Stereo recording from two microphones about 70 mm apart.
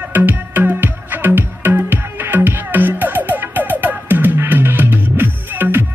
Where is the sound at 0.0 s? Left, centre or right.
Right.